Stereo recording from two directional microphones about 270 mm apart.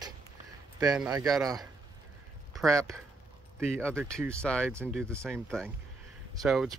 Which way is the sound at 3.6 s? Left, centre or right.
Centre.